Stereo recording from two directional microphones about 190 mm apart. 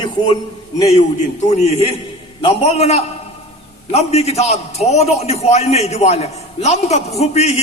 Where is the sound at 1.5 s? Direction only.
35° left (ahead or behind).